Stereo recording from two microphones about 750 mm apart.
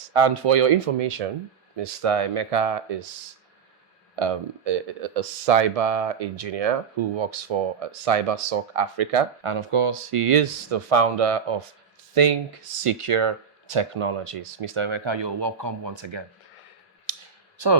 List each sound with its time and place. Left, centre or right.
0.1 s speech: right
4.1 s speech: right